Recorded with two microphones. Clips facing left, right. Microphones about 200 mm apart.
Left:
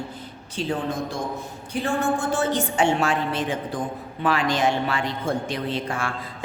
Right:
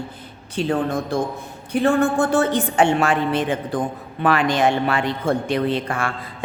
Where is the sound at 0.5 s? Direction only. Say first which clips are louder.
Right 5 dB; 60° right (ahead or behind).